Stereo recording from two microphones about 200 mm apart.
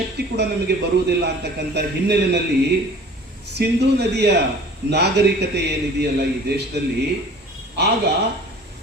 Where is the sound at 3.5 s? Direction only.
55° right (ahead or behind).